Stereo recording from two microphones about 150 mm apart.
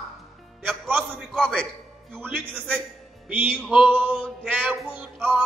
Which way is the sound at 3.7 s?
10° right (ahead or behind).